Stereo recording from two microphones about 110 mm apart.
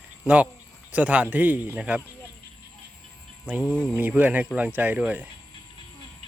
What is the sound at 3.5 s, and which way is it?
Speech, 20° right (ahead or behind).